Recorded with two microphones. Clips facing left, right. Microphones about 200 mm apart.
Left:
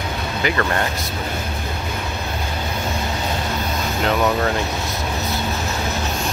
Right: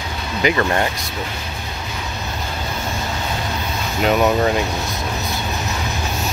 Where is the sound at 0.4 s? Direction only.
20° right (ahead or behind).